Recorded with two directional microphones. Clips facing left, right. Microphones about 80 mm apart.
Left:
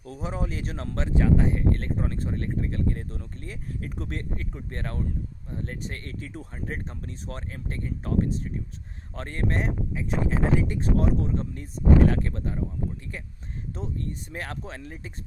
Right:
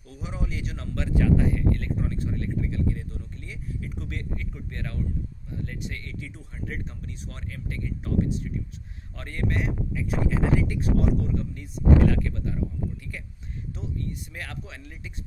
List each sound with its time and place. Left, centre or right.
0.0 s speech: left
13.7 s speech: left